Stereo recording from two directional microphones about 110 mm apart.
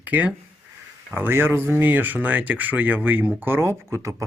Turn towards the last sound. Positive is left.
turn(degrees=-25)  # may be behind; listen again after turning